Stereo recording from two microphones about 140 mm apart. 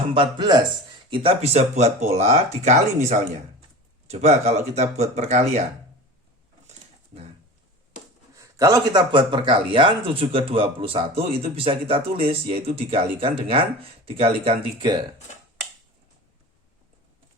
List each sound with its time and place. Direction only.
0.1 s speech: 35° right (ahead or behind)
1.1 s speech: 40° right (ahead or behind)
6.7 s pigeon: 50° right (ahead or behind)
8.4 s speech: 25° right (ahead or behind)